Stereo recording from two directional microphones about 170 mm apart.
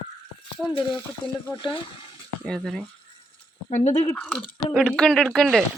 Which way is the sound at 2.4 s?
Centre (ahead or behind).